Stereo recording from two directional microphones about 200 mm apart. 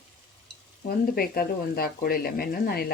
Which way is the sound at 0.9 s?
50° left (ahead or behind).